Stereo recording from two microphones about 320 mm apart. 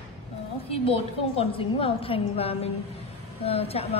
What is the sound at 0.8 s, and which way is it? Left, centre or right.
A woman's voice, centre.